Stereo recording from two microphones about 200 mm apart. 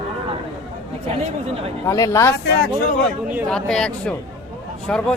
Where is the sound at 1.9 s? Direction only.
15° left (ahead or behind).